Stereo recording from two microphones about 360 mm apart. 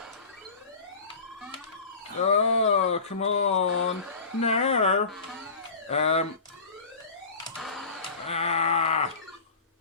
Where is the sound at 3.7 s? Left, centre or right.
Left.